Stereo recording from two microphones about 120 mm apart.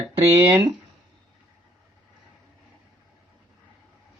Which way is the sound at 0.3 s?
20° right (ahead or behind).